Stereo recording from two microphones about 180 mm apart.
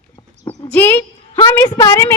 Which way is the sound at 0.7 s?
10° left (ahead or behind).